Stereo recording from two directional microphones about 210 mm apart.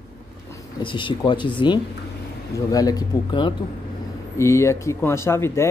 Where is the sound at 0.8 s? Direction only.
25° left (ahead or behind).